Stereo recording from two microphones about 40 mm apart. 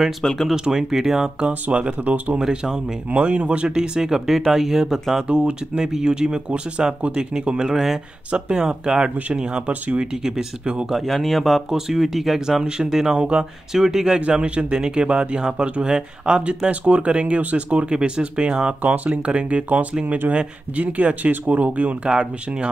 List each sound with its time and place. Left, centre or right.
0.2 s speech: centre
0.5 s speech: centre
1.5 s speech: right
2.4 s speech: centre
3.1 s speech: right; by 5.0 s centre
5.3 s speech: right
5.9 s speech: centre
8.3 s speech: right
11.1 s speech: centre
11.7 s speech: centre
12.6 s speech: centre
13.7 s speech: centre
14.2 s speech: right
22.1 s speech: right